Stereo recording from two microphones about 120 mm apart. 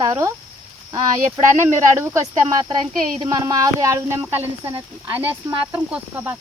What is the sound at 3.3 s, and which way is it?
Speech, 30° right (ahead or behind).